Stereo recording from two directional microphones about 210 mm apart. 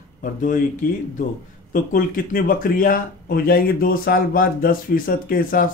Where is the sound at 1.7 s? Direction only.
40° left (ahead or behind).